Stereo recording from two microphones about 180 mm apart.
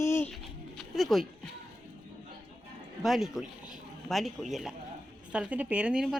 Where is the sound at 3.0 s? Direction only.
Centre (ahead or behind).